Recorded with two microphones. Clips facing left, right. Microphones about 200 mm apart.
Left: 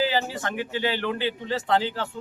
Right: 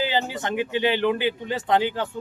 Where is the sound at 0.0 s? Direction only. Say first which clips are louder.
Even; 20° right (ahead or behind).